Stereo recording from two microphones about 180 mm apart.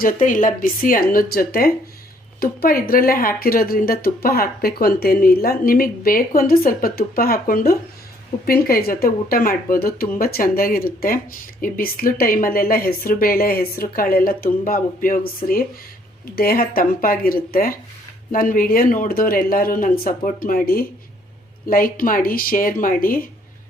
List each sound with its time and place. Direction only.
0.0 s speech: 45° left (ahead or behind)